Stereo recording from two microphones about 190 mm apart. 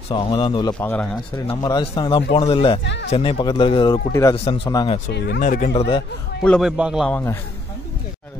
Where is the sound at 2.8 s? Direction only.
65° left (ahead or behind).